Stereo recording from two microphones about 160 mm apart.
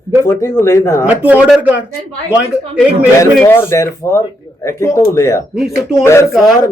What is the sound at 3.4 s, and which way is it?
Speech, 15° left (ahead or behind).